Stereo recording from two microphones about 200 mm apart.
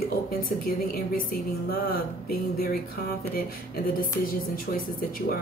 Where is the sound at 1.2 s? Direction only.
45° left (ahead or behind).